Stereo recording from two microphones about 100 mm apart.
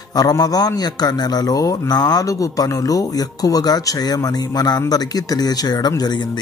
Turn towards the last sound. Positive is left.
turn(degrees=45)  # may be behind; listen again after turning